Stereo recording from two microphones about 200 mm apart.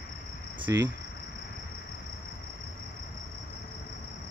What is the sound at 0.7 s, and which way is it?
Cricket, 15° right (ahead or behind).